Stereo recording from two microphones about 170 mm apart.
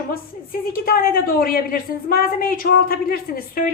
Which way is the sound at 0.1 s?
60° left (ahead or behind).